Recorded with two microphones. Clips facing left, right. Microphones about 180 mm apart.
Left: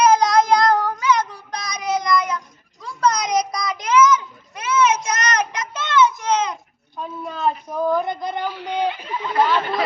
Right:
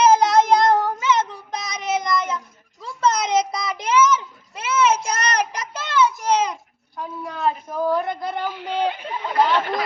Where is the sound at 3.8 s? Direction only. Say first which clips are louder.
Left 2 dB; 30° right (ahead or behind).